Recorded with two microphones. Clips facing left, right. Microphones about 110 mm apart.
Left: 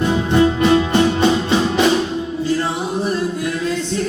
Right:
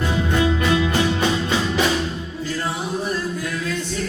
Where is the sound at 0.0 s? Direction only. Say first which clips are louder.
Left 6 dB; 25° left (ahead or behind).